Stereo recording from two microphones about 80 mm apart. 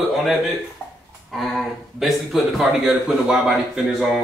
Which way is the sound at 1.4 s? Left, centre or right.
Centre.